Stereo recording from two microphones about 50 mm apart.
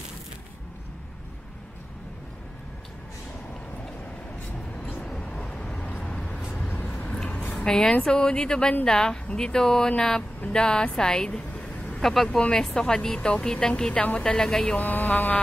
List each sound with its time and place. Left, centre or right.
5.2 s vehicle: left
6.0 s a sound: left
6.7 s a sound: left
7.5 s music: centre
8.0 s speech: centre
11.5 s vehicle: left
12.0 s speech: centre
12.3 s speech: left
14.2 s speech: centre
14.8 s speech: left